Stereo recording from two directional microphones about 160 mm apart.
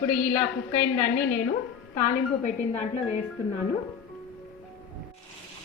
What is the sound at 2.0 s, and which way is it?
Speech, 50° left (ahead or behind).